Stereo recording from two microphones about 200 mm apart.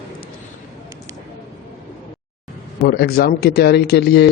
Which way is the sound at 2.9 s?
50° left (ahead or behind).